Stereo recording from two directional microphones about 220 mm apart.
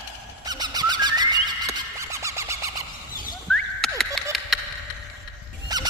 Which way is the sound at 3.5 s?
Centre (ahead or behind).